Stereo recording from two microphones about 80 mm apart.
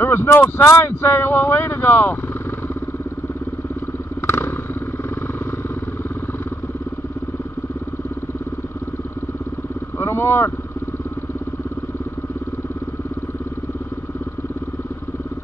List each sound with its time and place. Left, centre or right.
0.0 s speech: left
4.3 s motorcycle: left
9.9 s vehicle: left